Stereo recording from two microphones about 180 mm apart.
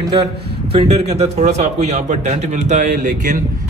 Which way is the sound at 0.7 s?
35° right (ahead or behind).